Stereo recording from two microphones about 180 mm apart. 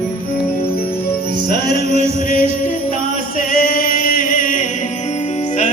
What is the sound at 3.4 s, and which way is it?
Chant, 50° left (ahead or behind).